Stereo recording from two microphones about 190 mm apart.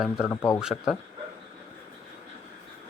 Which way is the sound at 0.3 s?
15° left (ahead or behind).